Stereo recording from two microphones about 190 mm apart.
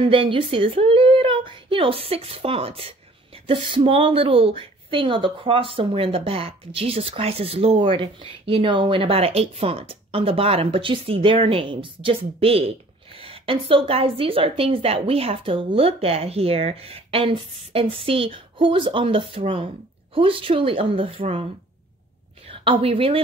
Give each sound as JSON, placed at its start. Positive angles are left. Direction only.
{"t": 0.0, "sound": "a woman's voice", "side_deg": -25}
{"t": 22.5, "sound": "a woman's voice", "side_deg": -30}